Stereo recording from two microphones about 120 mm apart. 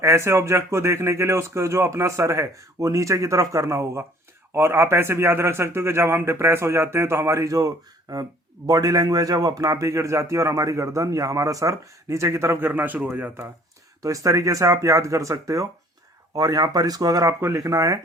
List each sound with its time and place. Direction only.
0.0 s speech: 25° right (ahead or behind)
14.0 s speech: 30° right (ahead or behind)